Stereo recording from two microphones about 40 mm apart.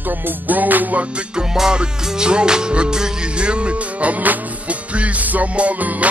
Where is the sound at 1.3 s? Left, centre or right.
Right.